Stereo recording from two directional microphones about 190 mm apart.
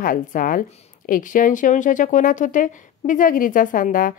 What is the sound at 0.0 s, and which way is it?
A woman's voice, 45° left (ahead or behind).